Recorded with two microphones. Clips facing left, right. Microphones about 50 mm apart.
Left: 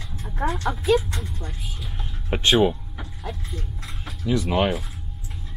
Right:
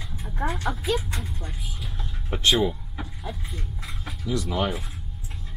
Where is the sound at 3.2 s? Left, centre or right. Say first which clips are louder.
Left 6 dB; centre.